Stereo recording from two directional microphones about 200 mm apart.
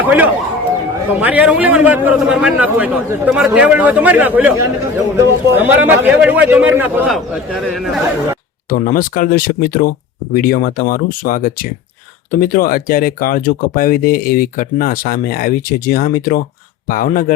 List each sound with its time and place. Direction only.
0.0 s a man's voice: 10° right (ahead or behind)
8.7 s speech: 45° left (ahead or behind)